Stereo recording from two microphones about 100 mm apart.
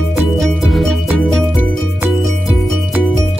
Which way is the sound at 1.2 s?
10° left (ahead or behind).